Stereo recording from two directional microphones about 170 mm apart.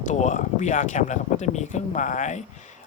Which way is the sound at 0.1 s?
45° left (ahead or behind).